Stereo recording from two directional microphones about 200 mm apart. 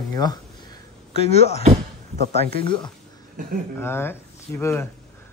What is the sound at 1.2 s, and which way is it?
Speech, 30° left (ahead or behind).